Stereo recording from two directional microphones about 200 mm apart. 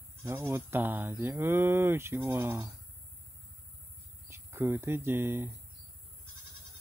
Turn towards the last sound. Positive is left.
turn(degrees=-10)  # may be behind; listen again after turning